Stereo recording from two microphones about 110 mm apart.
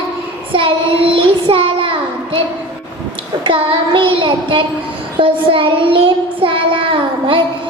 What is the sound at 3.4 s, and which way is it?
Child singing, 50° right (ahead or behind).